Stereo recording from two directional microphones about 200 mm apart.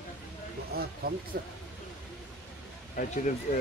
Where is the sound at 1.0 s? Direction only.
50° right (ahead or behind).